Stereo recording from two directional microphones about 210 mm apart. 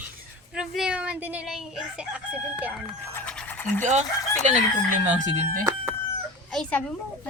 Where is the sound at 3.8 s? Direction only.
35° right (ahead or behind).